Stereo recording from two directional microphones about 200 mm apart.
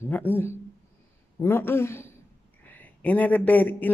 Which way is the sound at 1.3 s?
10° left (ahead or behind).